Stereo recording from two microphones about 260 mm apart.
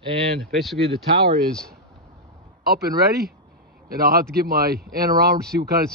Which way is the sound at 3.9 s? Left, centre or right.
Right.